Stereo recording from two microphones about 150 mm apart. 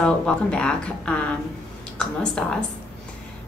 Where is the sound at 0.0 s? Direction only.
5° left (ahead or behind).